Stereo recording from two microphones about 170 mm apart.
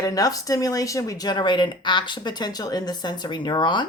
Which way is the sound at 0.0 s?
20° left (ahead or behind).